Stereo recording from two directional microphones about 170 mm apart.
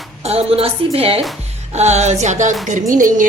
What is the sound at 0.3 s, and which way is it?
A woman's voice, 35° right (ahead or behind).